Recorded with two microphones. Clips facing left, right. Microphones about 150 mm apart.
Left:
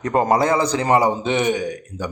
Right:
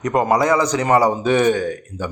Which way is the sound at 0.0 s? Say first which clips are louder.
Right 1 dB; 30° left (ahead or behind).